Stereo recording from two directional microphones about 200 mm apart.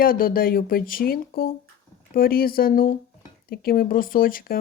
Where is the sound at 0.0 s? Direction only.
45° left (ahead or behind).